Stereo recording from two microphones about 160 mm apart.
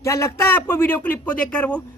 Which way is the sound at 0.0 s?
20° left (ahead or behind).